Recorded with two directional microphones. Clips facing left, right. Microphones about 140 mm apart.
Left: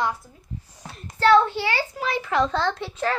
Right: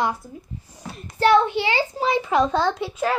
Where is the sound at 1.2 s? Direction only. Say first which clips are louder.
Even; 15° right (ahead or behind).